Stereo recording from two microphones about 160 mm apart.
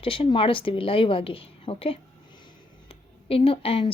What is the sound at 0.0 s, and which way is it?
Speech, 35° left (ahead or behind).